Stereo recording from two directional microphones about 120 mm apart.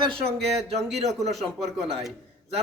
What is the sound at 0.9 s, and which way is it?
Speech, 65° right (ahead or behind).